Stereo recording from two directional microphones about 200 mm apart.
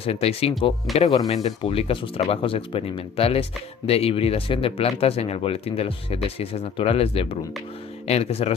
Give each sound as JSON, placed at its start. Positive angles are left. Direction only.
{"t": 0.0, "sound": "speech", "side_deg": 30}